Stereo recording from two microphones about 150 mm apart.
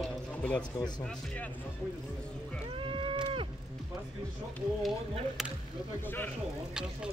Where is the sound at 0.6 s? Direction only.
30° left (ahead or behind).